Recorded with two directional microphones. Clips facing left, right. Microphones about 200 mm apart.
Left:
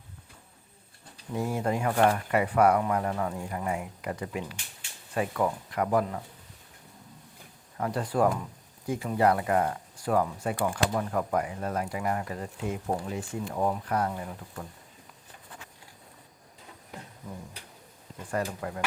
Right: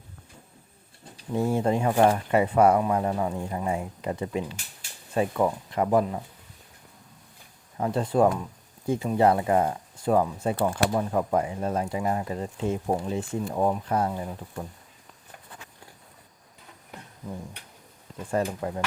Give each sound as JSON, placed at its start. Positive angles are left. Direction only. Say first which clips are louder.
{"t": 1.3, "sound": "speech", "louder": "right 5 dB", "side_deg": -25}
{"t": 7.8, "sound": "speech", "louder": "right 4 dB", "side_deg": -25}
{"t": 18.3, "sound": "speech", "louder": "right 4 dB", "side_deg": -25}